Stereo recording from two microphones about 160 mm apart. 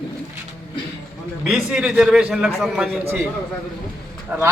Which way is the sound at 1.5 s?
5° right (ahead or behind).